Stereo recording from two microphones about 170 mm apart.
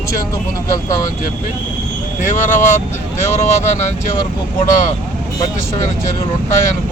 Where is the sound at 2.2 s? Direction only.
45° left (ahead or behind).